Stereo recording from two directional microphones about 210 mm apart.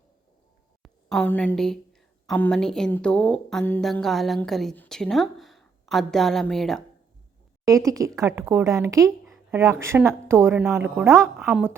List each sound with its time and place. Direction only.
0.8 s a woman's voice: 5° left (ahead or behind)
7.9 s speech: 15° right (ahead or behind)
11.2 s a woman's voice: centre (ahead or behind)